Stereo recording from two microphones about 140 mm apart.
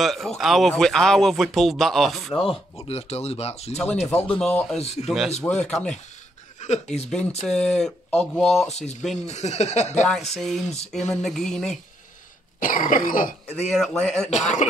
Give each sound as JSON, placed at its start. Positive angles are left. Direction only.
{"t": 0.0, "sound": "speech", "side_deg": 0}
{"t": 2.9, "sound": "speech", "side_deg": 45}
{"t": 3.7, "sound": "speech", "side_deg": 5}
{"t": 5.4, "sound": "speech", "side_deg": 5}
{"t": 6.6, "sound": "a sound", "side_deg": 55}
{"t": 7.4, "sound": "speech", "side_deg": 5}
{"t": 8.6, "sound": "speech", "side_deg": 50}
{"t": 10.0, "sound": "speech", "side_deg": 0}
{"t": 12.5, "sound": "cough", "side_deg": 70}
{"t": 13.7, "sound": "speech", "side_deg": 5}
{"t": 14.3, "sound": "speech", "side_deg": 55}